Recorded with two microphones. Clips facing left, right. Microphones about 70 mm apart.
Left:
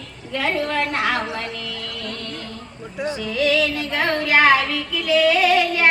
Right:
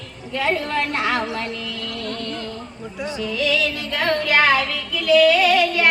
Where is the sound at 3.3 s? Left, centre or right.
Left.